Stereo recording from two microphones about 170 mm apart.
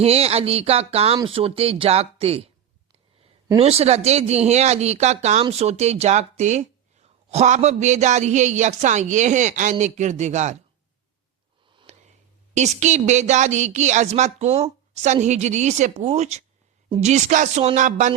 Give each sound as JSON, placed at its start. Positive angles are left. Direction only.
{"t": 0.0, "sound": "a man's voice", "side_deg": -35}
{"t": 11.9, "sound": "a sound", "side_deg": -45}
{"t": 12.5, "sound": "a woman's voice", "side_deg": -45}